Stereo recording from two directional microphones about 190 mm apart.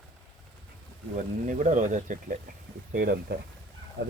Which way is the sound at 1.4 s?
40° right (ahead or behind).